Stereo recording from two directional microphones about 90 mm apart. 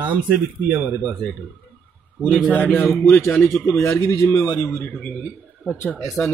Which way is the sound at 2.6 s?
20° left (ahead or behind).